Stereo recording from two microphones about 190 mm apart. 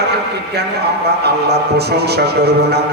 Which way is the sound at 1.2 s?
60° right (ahead or behind).